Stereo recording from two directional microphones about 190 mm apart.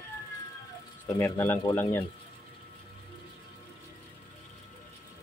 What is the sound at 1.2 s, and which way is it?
Speech, 10° left (ahead or behind).